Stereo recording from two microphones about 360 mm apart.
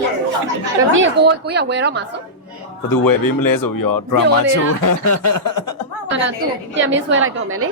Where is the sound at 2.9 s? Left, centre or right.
Left.